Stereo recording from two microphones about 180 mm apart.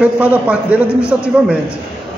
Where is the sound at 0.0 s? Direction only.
5° right (ahead or behind).